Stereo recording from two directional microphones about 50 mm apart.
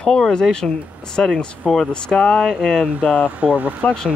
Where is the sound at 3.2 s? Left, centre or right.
Right.